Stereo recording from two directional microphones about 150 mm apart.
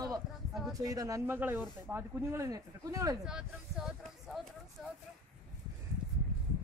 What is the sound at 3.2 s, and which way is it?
Speech, 5° right (ahead or behind).